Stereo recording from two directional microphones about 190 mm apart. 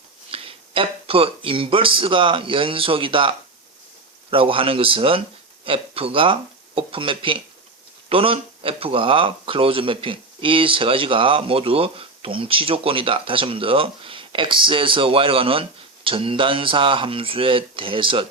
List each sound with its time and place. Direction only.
0.3 s speech: 30° right (ahead or behind)